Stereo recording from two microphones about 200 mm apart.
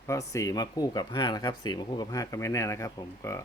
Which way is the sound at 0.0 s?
15° left (ahead or behind).